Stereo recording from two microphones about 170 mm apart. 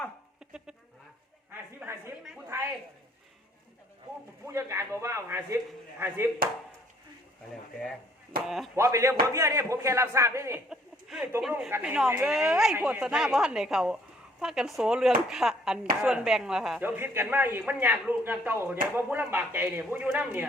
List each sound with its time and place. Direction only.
1.8 s speech: 15° right (ahead or behind)
2.5 s a sound: 15° right (ahead or behind)
4.4 s speech: 15° right (ahead or behind)
8.4 s a woman's voice: centre (ahead or behind)
8.7 s speech: 15° right (ahead or behind)
10.7 s a woman's voice: 5° right (ahead or behind)